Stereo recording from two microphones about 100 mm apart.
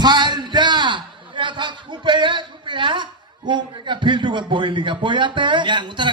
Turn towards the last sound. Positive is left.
turn(degrees=-50)  # may be behind; listen again after turning